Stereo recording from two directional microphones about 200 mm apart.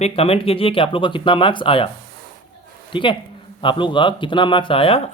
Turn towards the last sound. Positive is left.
turn(degrees=25)  # may be behind; listen again after turning